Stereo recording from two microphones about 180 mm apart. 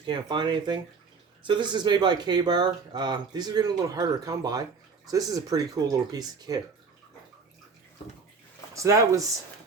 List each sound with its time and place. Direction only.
0.0 s speech: 25° right (ahead or behind)
8.7 s speech: 15° right (ahead or behind)